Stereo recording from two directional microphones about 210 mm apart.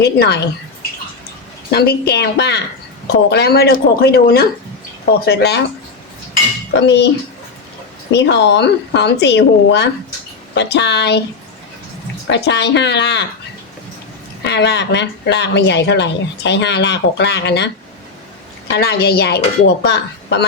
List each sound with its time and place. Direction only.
0.0 s speech: 50° left (ahead or behind)
1.7 s speech: 50° left (ahead or behind)
6.7 s speech: 55° left (ahead or behind)
8.1 s speech: 55° left (ahead or behind)
12.3 s speech: 55° left (ahead or behind)
14.4 s speech: 55° left (ahead or behind)
18.7 s speech: 50° left (ahead or behind)